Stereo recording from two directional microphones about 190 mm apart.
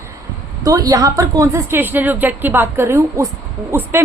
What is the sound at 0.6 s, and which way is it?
A woman's voice, 20° right (ahead or behind).